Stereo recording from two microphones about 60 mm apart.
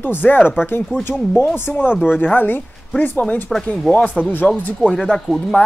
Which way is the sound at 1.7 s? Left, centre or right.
Left.